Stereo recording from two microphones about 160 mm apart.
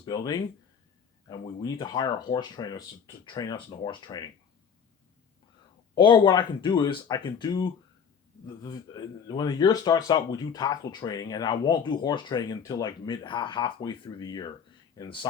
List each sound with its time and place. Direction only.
0.0 s speech: 25° left (ahead or behind)
6.0 s speech: 30° left (ahead or behind)